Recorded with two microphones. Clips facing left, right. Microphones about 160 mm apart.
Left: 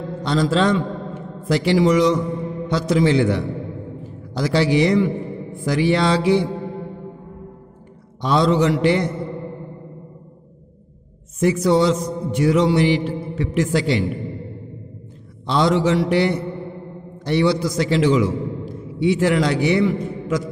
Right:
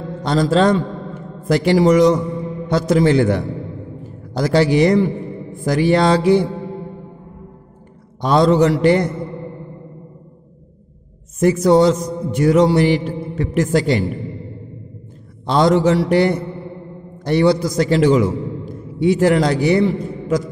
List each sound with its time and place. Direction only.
0.2 s mantra: 45° right (ahead or behind)
8.2 s mantra: 45° right (ahead or behind)
11.3 s mantra: 45° right (ahead or behind)
15.4 s mantra: 45° right (ahead or behind)
17.2 s a man's voice: 45° right (ahead or behind)